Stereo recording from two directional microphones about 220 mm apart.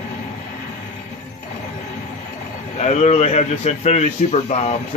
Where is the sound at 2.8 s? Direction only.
30° left (ahead or behind).